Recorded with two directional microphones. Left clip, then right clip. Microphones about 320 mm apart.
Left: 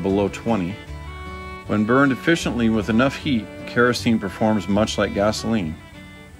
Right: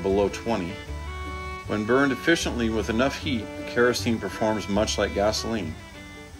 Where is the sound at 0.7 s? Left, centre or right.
Centre.